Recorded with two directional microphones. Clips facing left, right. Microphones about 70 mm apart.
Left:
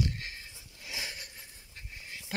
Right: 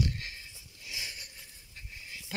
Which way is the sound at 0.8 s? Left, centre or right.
Left.